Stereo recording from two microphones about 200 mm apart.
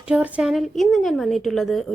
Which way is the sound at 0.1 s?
5° right (ahead or behind).